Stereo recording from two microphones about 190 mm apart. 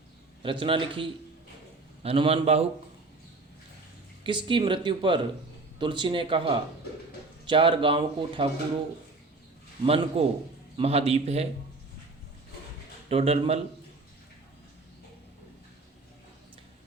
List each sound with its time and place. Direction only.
0.6 s speech: 25° right (ahead or behind)
2.0 s a man's voice: 30° right (ahead or behind)
4.2 s speech: 25° right (ahead or behind)
9.8 s a man's voice: 30° right (ahead or behind)
13.1 s a man's voice: 30° right (ahead or behind)